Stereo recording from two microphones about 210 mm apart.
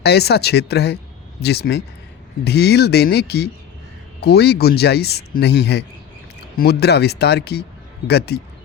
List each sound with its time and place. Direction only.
0.0 s speech: 50° left (ahead or behind)